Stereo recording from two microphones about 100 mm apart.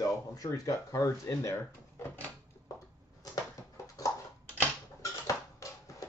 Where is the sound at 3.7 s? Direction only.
35° left (ahead or behind).